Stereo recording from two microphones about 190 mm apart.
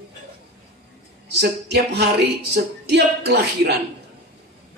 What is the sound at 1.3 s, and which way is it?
Speech, 60° right (ahead or behind).